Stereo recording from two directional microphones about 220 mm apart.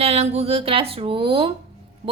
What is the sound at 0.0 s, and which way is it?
A woman's voice, 30° right (ahead or behind).